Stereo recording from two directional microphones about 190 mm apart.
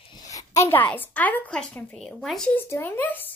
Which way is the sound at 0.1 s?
20° left (ahead or behind).